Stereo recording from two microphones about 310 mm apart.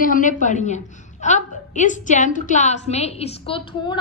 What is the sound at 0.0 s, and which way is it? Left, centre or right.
A woman's voice, left.